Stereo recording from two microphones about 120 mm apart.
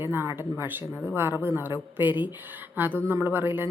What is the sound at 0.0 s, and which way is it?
A woman's voice, 20° right (ahead or behind).